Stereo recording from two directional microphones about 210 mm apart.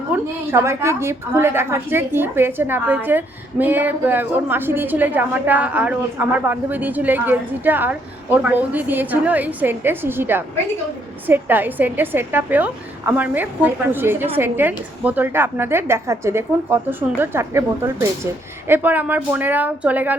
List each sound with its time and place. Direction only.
0.1 s a woman's voice: 10° right (ahead or behind)